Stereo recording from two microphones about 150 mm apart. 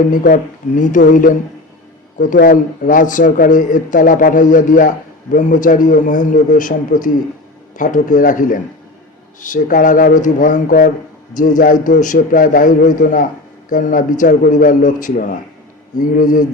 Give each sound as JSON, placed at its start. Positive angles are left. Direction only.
{"t": 0.1, "sound": "speech", "side_deg": 65}